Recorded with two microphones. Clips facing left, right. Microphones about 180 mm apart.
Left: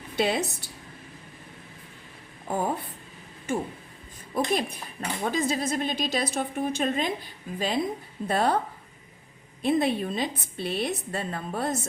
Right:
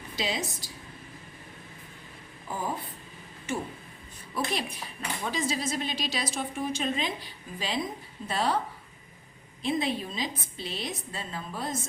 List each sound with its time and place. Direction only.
0.2 s a woman's voice: 60° left (ahead or behind)
0.6 s a sound: 60° left (ahead or behind)
2.5 s a woman's voice: 55° left (ahead or behind)
9.6 s a woman's voice: 60° left (ahead or behind)